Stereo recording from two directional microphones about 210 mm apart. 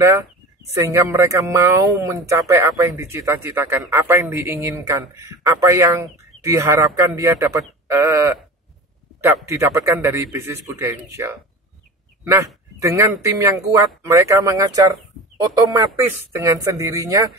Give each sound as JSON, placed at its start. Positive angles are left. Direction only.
{"t": 0.0, "sound": "a man's voice", "side_deg": -10}
{"t": 12.7, "sound": "a man's voice", "side_deg": -15}